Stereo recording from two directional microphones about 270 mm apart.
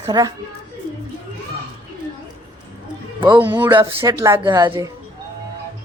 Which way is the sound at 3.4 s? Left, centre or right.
Centre.